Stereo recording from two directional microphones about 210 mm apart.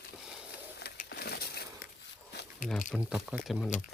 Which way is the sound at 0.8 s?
50° left (ahead or behind).